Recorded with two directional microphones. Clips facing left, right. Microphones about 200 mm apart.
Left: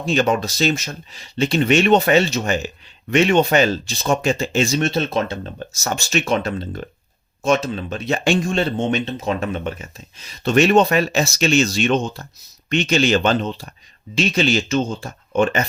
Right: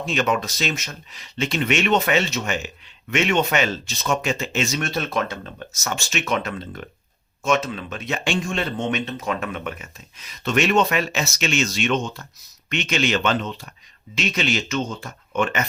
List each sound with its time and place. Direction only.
0.0 s speech: 35° left (ahead or behind)